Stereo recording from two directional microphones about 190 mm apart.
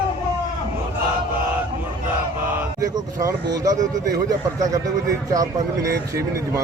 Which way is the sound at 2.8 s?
15° right (ahead or behind).